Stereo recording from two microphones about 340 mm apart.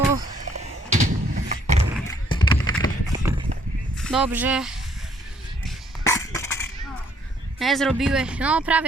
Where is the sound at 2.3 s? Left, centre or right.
Centre.